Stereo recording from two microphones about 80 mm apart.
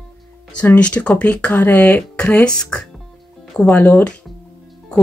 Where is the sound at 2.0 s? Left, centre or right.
Centre.